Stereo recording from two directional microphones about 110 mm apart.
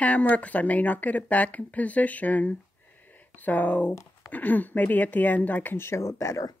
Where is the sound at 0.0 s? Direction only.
10° left (ahead or behind).